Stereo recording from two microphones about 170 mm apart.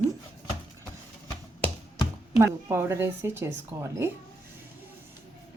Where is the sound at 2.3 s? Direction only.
15° right (ahead or behind).